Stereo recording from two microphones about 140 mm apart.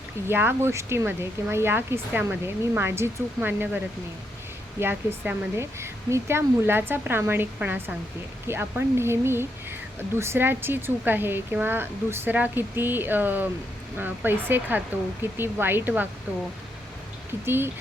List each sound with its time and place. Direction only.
0.3 s speech: 15° right (ahead or behind)
4.8 s speech: 15° right (ahead or behind)
17.4 s speech: 15° right (ahead or behind)